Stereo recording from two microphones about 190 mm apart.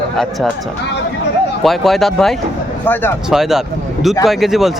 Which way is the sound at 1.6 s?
Centre (ahead or behind).